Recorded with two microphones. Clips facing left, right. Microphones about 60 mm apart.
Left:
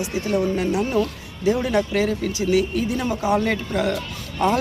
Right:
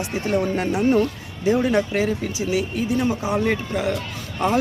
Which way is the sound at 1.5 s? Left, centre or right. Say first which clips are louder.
Right 1 dB; right.